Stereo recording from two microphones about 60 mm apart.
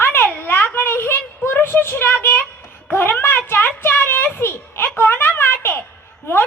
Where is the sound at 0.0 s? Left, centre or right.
Left.